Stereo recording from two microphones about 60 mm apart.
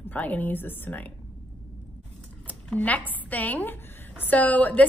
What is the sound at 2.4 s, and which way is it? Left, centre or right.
A woman's voice, left.